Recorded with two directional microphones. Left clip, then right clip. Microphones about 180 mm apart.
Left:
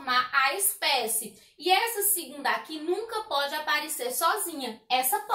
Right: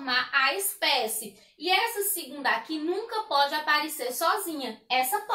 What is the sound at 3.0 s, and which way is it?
A woman's voice, 15° right (ahead or behind).